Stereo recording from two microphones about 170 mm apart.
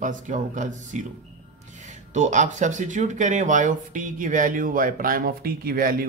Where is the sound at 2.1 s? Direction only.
45° right (ahead or behind).